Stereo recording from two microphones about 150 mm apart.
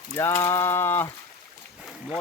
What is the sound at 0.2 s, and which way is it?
Speech, 15° left (ahead or behind).